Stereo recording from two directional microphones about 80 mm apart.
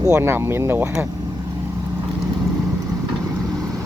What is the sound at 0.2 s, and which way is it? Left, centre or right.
Speech, right.